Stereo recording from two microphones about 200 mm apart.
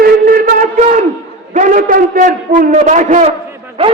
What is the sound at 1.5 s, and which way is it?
A man's voice, 40° right (ahead or behind).